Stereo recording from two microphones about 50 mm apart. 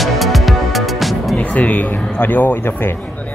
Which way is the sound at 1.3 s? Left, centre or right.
Left.